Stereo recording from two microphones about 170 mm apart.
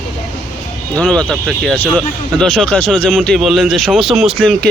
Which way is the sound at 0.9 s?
5° left (ahead or behind).